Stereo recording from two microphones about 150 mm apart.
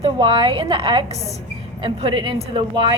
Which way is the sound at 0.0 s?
35° right (ahead or behind).